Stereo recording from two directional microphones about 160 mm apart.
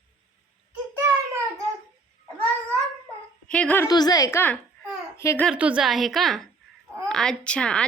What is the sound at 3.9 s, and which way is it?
A woman's voice, 25° left (ahead or behind).